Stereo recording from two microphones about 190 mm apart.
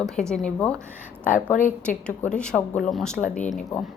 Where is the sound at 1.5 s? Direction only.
45° left (ahead or behind).